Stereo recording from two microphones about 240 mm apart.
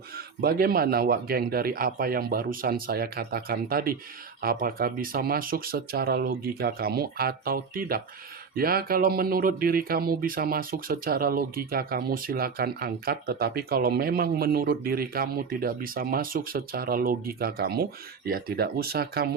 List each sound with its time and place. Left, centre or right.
0.4 s speech: right